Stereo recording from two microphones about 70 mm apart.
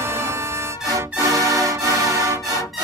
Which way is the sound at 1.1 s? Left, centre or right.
Right.